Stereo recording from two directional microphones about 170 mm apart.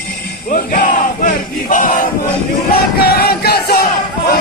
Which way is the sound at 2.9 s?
65° left (ahead or behind).